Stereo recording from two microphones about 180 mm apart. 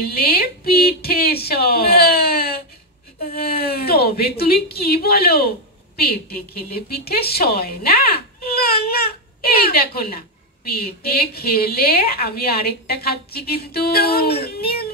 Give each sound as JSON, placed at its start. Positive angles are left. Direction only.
{"t": 0.0, "sound": "a woman's voice", "side_deg": 60}